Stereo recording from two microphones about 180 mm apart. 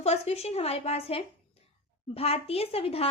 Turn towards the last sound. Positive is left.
turn(degrees=35)  # may be behind; listen again after turning